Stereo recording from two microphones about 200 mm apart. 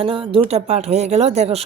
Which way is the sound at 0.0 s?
25° right (ahead or behind).